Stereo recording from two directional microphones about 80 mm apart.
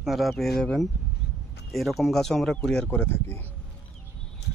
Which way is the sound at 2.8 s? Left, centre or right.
Left.